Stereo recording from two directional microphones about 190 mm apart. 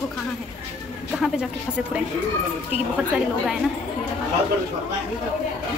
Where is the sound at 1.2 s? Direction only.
5° right (ahead or behind).